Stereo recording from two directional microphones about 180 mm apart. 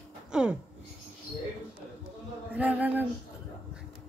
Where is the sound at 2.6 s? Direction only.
10° right (ahead or behind).